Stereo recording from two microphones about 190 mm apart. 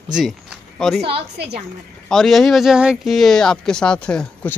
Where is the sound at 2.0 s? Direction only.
Centre (ahead or behind).